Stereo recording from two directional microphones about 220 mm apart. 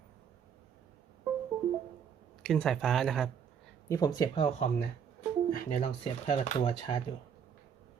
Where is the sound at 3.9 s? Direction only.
15° left (ahead or behind).